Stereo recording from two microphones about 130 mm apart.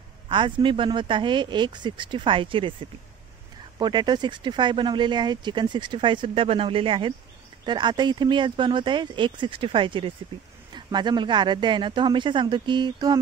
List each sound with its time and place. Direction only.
0.3 s speech: 40° right (ahead or behind)
3.7 s speech: 35° right (ahead or behind)